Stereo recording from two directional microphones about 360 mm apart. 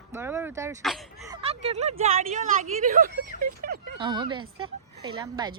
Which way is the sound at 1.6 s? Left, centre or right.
Centre.